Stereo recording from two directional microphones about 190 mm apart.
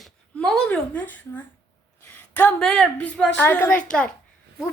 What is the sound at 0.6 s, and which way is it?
A child's voice, 10° left (ahead or behind).